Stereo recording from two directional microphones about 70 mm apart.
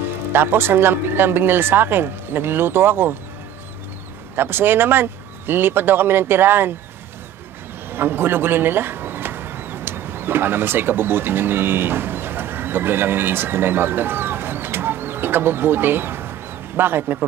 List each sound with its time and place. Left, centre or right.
0.3 s speech: right
4.4 s speech: right
7.9 s speech: right